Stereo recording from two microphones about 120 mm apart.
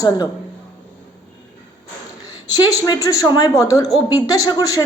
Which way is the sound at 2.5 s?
35° left (ahead or behind).